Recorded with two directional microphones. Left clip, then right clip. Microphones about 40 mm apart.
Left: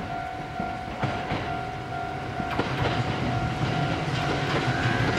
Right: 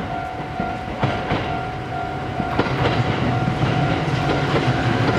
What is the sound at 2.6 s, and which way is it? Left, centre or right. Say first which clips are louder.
Train: right 7 dB; centre.